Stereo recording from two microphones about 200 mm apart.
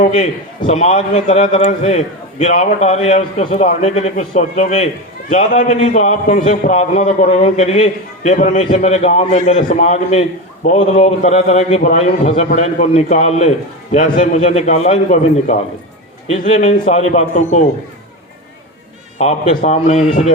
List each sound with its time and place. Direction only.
0.6 s a man's voice: 30° left (ahead or behind)
19.2 s a man's voice: 30° left (ahead or behind)